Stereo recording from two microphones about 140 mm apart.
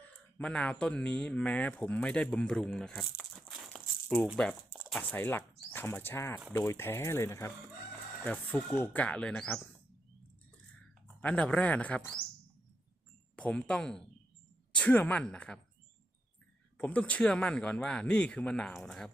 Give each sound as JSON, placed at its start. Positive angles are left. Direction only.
{"t": 0.3, "sound": "speech", "side_deg": 10}
{"t": 4.7, "sound": "a sound", "side_deg": -5}
{"t": 4.9, "sound": "speech", "side_deg": 10}
{"t": 11.2, "sound": "speech", "side_deg": 10}
{"t": 13.3, "sound": "speech", "side_deg": 5}
{"t": 16.7, "sound": "speech", "side_deg": 10}